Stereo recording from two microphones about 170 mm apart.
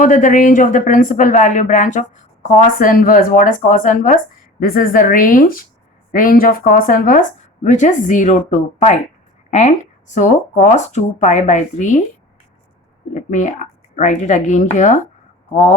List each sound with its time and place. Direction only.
0.0 s a woman's voice: 50° left (ahead or behind)
13.1 s speech: 45° left (ahead or behind)